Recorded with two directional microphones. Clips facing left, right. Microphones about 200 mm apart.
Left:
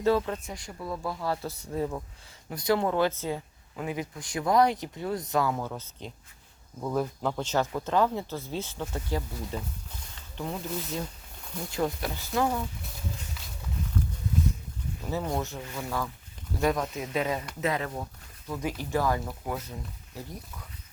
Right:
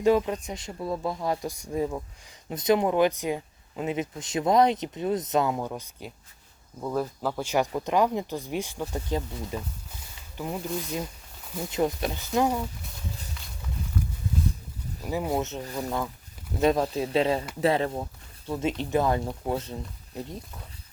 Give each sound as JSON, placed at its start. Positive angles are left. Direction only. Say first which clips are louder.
{"t": 0.0, "sound": "speech", "louder": "right 3 dB", "side_deg": -15}
{"t": 10.2, "sound": "a sound", "louder": "right 2 dB", "side_deg": -10}
{"t": 11.7, "sound": "speech", "louder": "right 3 dB", "side_deg": -20}
{"t": 15.0, "sound": "speech", "louder": "right 3 dB", "side_deg": -10}
{"t": 15.6, "sound": "speech", "louder": "right 4 dB", "side_deg": -35}
{"t": 16.6, "sound": "speech", "louder": "right 4 dB", "side_deg": -25}